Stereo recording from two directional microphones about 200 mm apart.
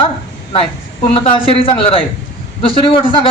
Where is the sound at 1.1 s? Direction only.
25° left (ahead or behind).